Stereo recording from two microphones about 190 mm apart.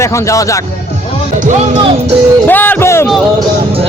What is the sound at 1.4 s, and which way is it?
Speech, 40° right (ahead or behind).